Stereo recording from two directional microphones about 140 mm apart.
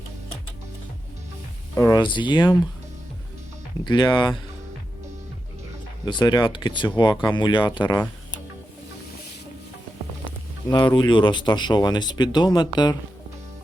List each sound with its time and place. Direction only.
1.7 s speech: 25° left (ahead or behind)
3.8 s speech: 30° left (ahead or behind)
6.1 s speech: 30° left (ahead or behind)
10.7 s speech: 30° left (ahead or behind)